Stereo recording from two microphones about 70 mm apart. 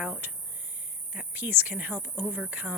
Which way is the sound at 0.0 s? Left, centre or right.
Right.